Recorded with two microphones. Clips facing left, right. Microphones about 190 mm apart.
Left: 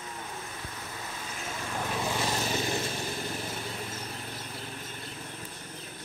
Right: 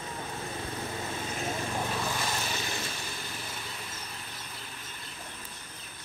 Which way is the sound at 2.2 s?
35° left (ahead or behind).